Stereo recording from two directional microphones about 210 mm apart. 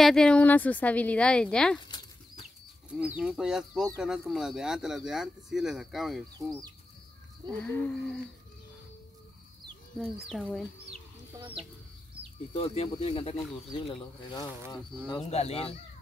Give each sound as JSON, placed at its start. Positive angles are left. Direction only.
{"t": 0.0, "sound": "speech", "side_deg": 5}
{"t": 1.9, "sound": "bird", "side_deg": 20}
{"t": 2.9, "sound": "speech", "side_deg": -5}
{"t": 7.5, "sound": "speech", "side_deg": 5}
{"t": 9.9, "sound": "speech", "side_deg": 0}
{"t": 12.5, "sound": "speech", "side_deg": 30}
{"t": 15.2, "sound": "speech", "side_deg": 30}